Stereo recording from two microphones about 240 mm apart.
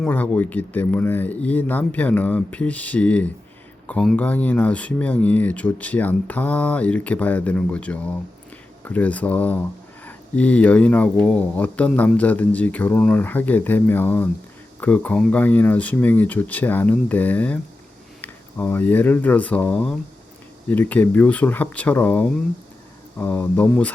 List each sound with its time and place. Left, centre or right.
0.0 s speech: centre